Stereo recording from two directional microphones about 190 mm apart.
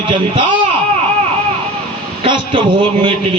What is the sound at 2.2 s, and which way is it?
A man's voice, 30° right (ahead or behind).